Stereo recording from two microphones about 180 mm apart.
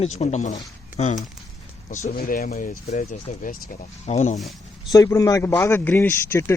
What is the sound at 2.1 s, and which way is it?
Speech, 60° left (ahead or behind).